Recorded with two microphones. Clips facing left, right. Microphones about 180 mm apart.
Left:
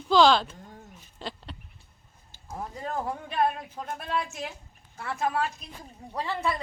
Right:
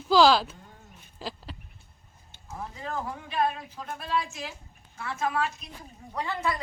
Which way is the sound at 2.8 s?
55° left (ahead or behind).